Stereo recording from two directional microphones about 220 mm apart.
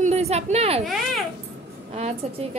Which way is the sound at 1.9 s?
30° right (ahead or behind).